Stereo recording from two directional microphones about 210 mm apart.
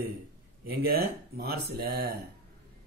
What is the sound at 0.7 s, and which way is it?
Speech, 45° right (ahead or behind).